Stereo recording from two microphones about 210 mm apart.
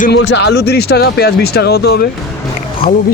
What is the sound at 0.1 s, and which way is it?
Speech, 55° left (ahead or behind).